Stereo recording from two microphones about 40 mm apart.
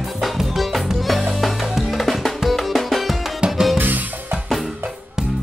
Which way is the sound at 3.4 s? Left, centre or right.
Right.